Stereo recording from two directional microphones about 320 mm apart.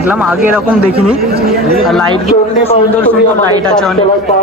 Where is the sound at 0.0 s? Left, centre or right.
Centre.